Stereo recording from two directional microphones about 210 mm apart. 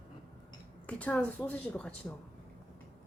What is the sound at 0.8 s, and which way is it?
A woman's voice, 5° left (ahead or behind).